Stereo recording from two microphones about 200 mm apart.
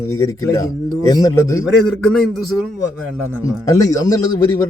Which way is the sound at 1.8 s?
5° left (ahead or behind).